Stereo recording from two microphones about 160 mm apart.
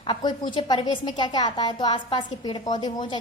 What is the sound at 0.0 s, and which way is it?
A woman's voice, 30° left (ahead or behind).